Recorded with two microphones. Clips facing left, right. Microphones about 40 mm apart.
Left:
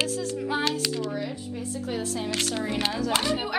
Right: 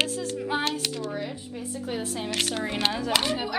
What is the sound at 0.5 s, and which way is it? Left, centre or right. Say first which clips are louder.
Speech: even; centre.